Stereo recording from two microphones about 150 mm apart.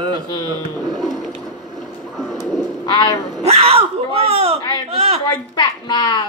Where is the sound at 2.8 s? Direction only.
30° left (ahead or behind).